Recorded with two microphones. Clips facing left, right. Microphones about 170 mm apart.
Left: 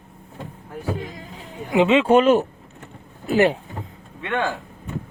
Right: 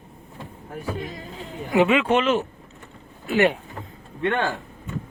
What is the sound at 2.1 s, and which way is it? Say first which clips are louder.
Speech: left 6 dB; 40° left (ahead or behind).